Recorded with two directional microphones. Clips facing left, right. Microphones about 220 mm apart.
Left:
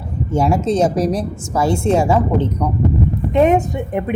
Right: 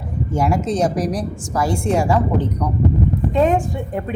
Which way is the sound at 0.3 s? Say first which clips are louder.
Left 3 dB; 25° left (ahead or behind).